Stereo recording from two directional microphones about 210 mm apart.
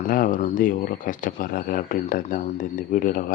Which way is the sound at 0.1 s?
40° left (ahead or behind).